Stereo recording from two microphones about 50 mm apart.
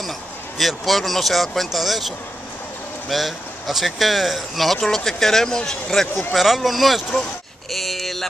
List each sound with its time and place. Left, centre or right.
0.6 s speech: centre
6.3 s speech: centre
7.7 s a sound: centre